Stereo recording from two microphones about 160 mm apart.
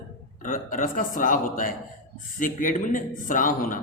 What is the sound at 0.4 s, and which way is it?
Speech, 55° left (ahead or behind).